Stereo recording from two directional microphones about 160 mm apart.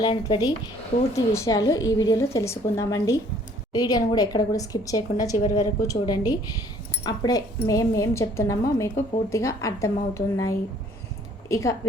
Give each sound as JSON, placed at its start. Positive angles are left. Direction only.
{"t": 0.0, "sound": "a woman's voice", "side_deg": 25}